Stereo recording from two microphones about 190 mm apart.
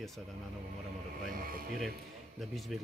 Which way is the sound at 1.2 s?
50° right (ahead or behind).